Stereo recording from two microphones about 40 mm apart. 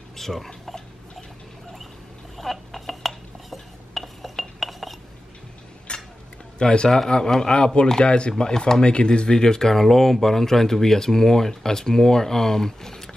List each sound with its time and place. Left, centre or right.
0.2 s speech: centre
2.3 s dishes: centre
5.9 s cutlery: left
6.6 s speech: left
8.8 s speech: left